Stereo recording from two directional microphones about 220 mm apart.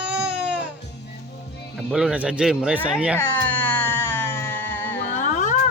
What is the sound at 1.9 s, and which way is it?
A man's voice, 5° right (ahead or behind).